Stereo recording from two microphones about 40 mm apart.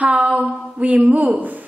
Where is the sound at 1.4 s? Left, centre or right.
Right.